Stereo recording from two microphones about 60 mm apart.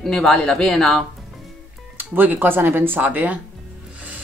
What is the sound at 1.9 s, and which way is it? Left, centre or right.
Speech, right.